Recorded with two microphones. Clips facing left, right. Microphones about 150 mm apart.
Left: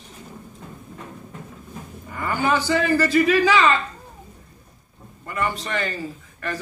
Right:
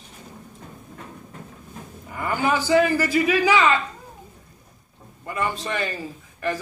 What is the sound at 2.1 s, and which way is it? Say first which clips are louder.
A man's voice: left 1 dB; 15° right (ahead or behind).